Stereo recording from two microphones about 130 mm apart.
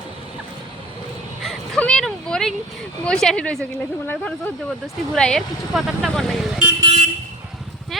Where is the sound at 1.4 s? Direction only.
5° right (ahead or behind).